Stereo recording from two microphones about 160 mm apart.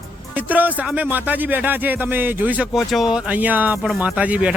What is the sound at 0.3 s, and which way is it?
Speech, 10° right (ahead or behind).